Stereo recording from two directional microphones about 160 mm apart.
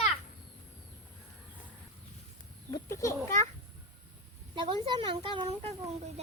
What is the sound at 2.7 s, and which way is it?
Speech, 20° left (ahead or behind).